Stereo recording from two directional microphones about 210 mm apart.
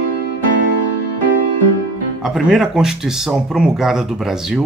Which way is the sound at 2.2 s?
Centre (ahead or behind).